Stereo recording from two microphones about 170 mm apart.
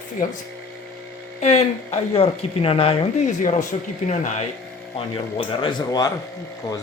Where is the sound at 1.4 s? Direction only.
40° left (ahead or behind).